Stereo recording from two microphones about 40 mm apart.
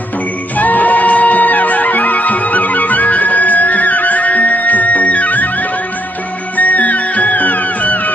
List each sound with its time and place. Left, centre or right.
0.5 s music: left